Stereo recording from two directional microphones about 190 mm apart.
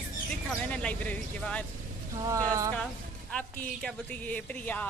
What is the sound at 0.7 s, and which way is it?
Speech, 5° left (ahead or behind).